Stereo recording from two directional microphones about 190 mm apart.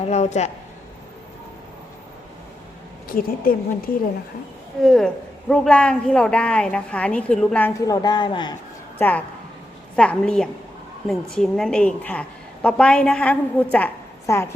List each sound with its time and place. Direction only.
0.0 s a man's voice: 35° left (ahead or behind)
3.1 s speech: 50° left (ahead or behind)
4.8 s a man's voice: 5° left (ahead or behind)
7.8 s speech: 20° left (ahead or behind)
9.0 s a woman's voice: 10° left (ahead or behind)